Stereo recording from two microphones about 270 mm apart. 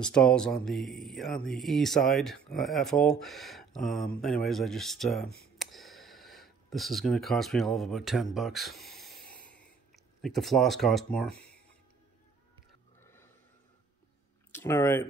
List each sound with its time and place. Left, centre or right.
0.0 s speech: centre
13.0 s a sound: centre
14.5 s speech: centre